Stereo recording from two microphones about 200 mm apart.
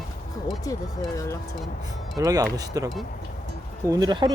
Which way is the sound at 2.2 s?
15° right (ahead or behind).